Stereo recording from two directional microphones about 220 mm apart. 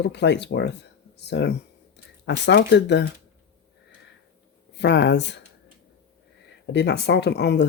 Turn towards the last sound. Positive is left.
turn(degrees=50)  # may be behind; listen again after turning